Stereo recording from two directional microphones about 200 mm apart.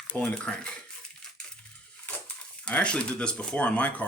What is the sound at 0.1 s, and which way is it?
Speech, 5° left (ahead or behind).